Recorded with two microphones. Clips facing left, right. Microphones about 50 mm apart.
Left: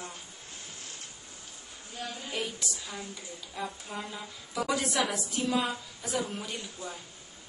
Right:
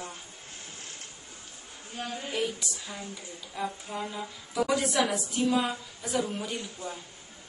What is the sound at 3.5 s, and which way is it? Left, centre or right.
A woman's voice, centre.